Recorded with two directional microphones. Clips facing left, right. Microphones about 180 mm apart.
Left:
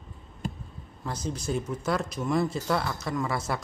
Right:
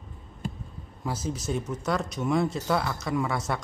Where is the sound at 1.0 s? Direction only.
5° right (ahead or behind).